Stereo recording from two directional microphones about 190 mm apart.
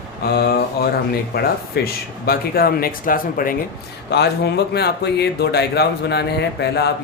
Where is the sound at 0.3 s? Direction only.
55° left (ahead or behind).